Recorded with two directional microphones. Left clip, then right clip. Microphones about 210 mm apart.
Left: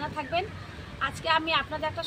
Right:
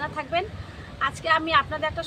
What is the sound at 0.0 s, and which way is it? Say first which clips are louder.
Speech: right 3 dB; centre (ahead or behind).